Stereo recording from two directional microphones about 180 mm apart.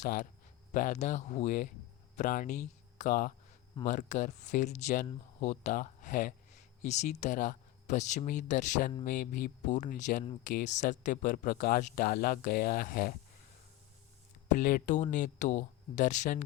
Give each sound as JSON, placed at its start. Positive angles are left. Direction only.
{"t": 0.0, "sound": "speech", "side_deg": 45}
{"t": 14.4, "sound": "speech", "side_deg": 45}